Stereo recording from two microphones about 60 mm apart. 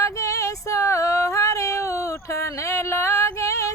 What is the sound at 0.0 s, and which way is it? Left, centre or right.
Female singing, left.